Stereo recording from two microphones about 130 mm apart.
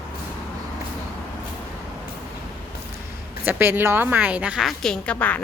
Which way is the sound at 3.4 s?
15° right (ahead or behind).